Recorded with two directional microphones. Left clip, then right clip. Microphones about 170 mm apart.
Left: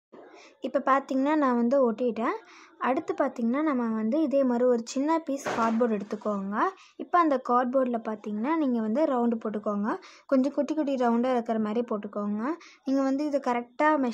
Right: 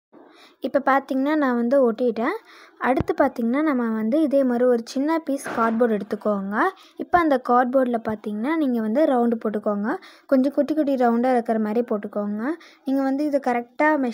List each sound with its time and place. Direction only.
0.6 s speech: 25° right (ahead or behind)